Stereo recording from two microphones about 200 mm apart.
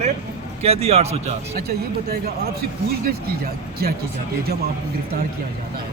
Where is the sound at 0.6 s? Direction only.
30° right (ahead or behind).